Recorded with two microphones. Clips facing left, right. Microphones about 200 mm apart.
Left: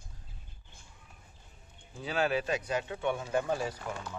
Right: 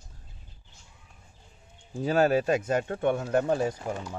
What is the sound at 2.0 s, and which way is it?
A man's voice, 45° right (ahead or behind).